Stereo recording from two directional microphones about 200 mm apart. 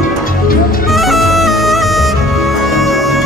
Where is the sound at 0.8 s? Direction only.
Centre (ahead or behind).